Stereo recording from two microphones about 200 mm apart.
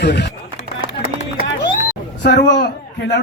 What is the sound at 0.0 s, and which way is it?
Speech, 55° left (ahead or behind).